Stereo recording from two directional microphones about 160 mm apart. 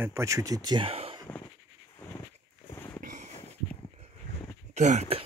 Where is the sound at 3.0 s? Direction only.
50° right (ahead or behind).